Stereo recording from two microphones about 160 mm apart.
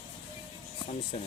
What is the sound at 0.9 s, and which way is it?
Speech, 45° left (ahead or behind).